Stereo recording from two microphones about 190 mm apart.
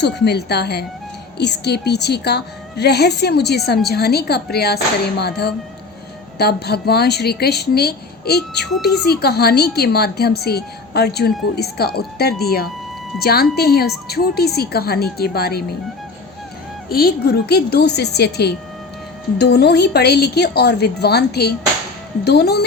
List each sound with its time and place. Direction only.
0.0 s speech: 60° left (ahead or behind)
16.9 s speech: 55° left (ahead or behind)